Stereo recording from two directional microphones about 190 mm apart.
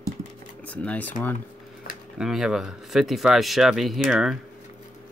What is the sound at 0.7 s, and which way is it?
Speech, 10° left (ahead or behind).